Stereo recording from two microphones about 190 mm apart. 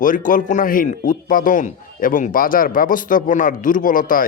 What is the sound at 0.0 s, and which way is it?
A man's voice, 45° left (ahead or behind).